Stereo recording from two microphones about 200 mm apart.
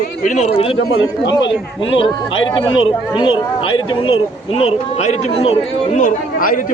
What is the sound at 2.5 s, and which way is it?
Speech, 25° left (ahead or behind).